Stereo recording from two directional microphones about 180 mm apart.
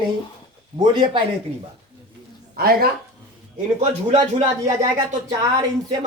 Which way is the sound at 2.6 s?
55° right (ahead or behind).